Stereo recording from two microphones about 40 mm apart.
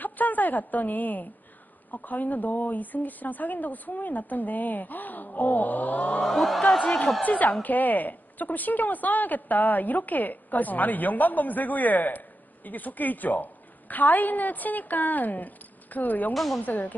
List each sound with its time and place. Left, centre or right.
0.0 s a woman's voice: left
6.2 s speech: centre
7.2 s a woman's voice: left